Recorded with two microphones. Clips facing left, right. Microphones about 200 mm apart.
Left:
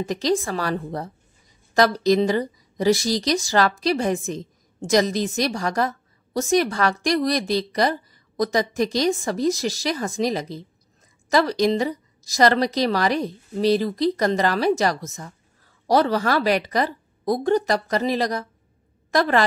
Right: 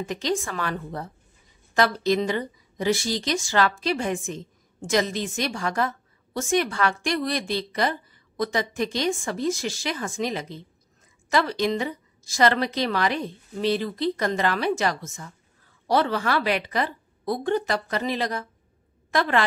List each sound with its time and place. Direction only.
0.0 s a woman's voice: 35° left (ahead or behind)